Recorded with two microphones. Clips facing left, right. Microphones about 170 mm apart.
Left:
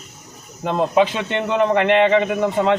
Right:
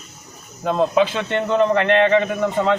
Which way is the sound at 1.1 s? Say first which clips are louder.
Right 1 dB; 15° left (ahead or behind).